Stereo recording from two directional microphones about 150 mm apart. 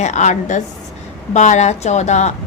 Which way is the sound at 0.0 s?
50° left (ahead or behind).